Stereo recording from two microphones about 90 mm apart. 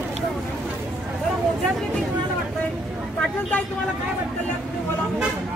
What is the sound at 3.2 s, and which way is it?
Speech, 15° left (ahead or behind).